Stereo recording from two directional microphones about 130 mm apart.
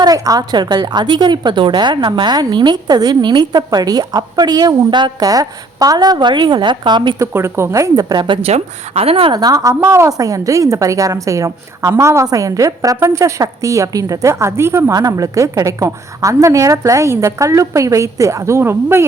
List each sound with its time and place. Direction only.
0.0 s a woman's voice: 30° right (ahead or behind)
7.2 s a woman's voice: 20° right (ahead or behind)
8.4 s a woman's voice: 50° right (ahead or behind)
9.3 s a woman's voice: 30° right (ahead or behind)